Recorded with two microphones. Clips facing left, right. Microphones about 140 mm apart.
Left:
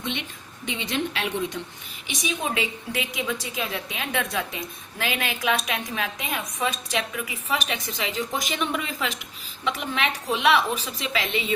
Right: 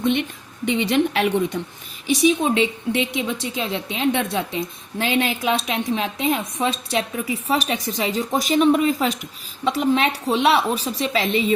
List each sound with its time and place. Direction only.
0.0 s a woman's voice: 50° right (ahead or behind)
2.0 s a woman's voice: 30° right (ahead or behind)